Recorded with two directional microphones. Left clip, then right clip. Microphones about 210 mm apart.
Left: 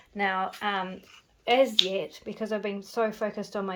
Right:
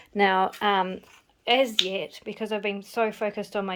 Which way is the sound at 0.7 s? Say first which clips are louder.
Right 7 dB; 25° right (ahead or behind).